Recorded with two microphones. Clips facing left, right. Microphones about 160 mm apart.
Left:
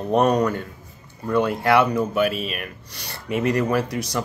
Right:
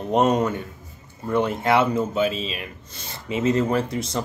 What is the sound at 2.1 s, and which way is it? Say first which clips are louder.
Speech: left 1 dB; 65° left (ahead or behind).